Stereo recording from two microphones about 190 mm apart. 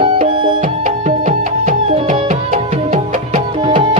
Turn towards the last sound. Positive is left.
turn(degrees=-45)  # may be behind; listen again after turning